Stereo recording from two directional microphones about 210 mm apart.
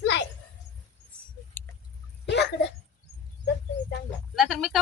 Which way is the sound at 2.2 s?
55° left (ahead or behind).